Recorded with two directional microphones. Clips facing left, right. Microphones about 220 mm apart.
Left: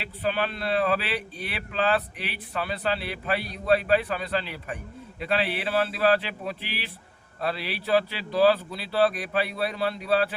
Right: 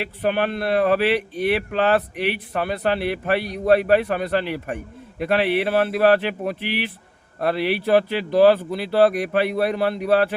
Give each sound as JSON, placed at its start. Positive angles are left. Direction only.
{"t": 0.2, "sound": "speech", "side_deg": -55}